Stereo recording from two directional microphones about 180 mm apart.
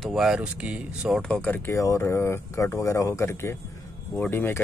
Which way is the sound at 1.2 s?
5° left (ahead or behind).